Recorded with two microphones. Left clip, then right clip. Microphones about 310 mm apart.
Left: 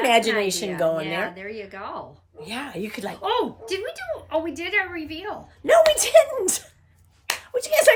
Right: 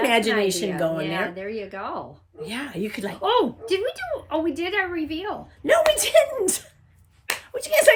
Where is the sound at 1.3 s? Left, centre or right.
Centre.